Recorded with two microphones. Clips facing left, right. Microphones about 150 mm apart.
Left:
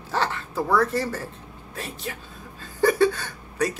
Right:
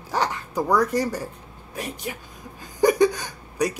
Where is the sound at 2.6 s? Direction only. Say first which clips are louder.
Right 2 dB; 15° right (ahead or behind).